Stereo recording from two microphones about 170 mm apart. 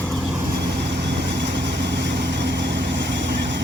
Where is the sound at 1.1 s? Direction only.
90° right.